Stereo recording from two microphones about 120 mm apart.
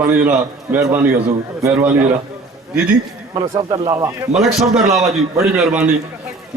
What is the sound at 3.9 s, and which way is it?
Speech, 25° right (ahead or behind).